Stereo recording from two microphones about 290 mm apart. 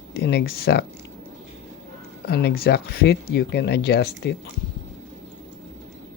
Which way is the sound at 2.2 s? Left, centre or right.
Left.